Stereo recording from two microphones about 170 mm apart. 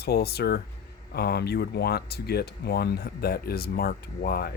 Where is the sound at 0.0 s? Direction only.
70° left (ahead or behind).